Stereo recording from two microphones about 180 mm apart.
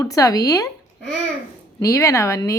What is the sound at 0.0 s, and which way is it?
Speech, 20° left (ahead or behind).